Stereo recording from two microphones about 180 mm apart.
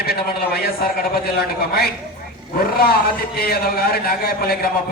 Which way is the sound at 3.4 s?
60° left (ahead or behind).